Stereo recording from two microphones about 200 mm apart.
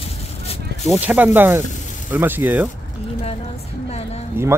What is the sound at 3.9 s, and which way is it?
Speech, 30° left (ahead or behind).